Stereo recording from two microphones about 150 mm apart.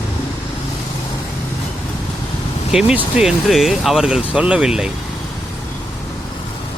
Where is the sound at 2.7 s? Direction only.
5° right (ahead or behind).